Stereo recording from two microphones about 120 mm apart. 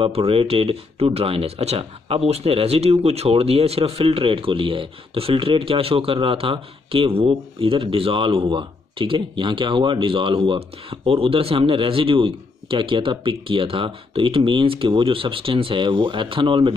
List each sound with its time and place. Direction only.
0.0 s speech: 50° right (ahead or behind)